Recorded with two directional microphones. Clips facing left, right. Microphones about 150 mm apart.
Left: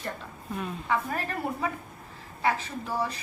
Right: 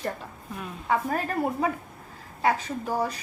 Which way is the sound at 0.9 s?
45° right (ahead or behind).